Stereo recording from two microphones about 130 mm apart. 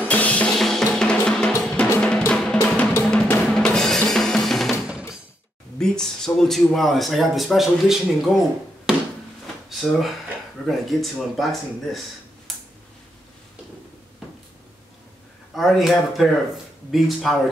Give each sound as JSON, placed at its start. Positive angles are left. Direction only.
{"t": 0.0, "sound": "drum", "side_deg": 10}
{"t": 2.6, "sound": "drum", "side_deg": 20}
{"t": 3.1, "sound": "drum", "side_deg": 5}
{"t": 5.8, "sound": "speech", "side_deg": 5}
{"t": 8.9, "sound": "a sound", "side_deg": -5}
{"t": 9.7, "sound": "speech", "side_deg": 0}
{"t": 15.5, "sound": "speech", "side_deg": 0}